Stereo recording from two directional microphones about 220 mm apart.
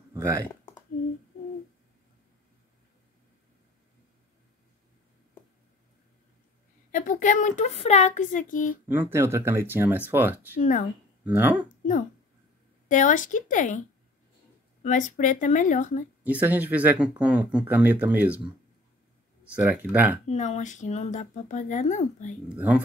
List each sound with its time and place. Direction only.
0.1 s a sound: 15° right (ahead or behind)
6.9 s speech: 40° left (ahead or behind)
9.1 s speech: 10° right (ahead or behind)
10.6 s speech: 35° left (ahead or behind)
11.2 s speech: 10° right (ahead or behind)
12.8 s speech: 35° left (ahead or behind)
14.8 s speech: 35° left (ahead or behind)
16.3 s speech: 5° right (ahead or behind)
19.5 s speech: 5° right (ahead or behind)
20.2 s speech: 30° left (ahead or behind)